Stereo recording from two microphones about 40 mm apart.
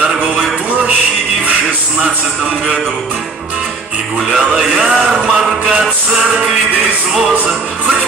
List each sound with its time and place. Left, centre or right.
4.4 s music: centre
5.2 s chant: centre